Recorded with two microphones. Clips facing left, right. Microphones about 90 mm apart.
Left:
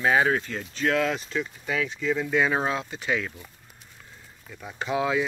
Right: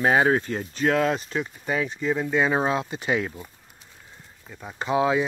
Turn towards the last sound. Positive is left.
turn(degrees=-30)  # may be behind; listen again after turning